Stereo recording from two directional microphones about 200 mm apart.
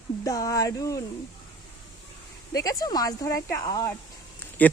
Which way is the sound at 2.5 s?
15° left (ahead or behind).